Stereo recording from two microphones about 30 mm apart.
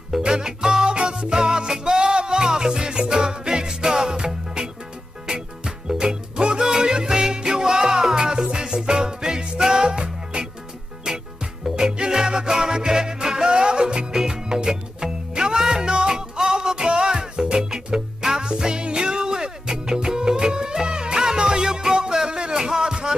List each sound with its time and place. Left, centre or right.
0.2 s music: right
5.9 s music: right
22.1 s a sound: right